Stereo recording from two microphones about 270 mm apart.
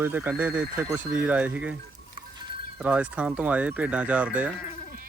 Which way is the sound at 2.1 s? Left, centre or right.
Centre.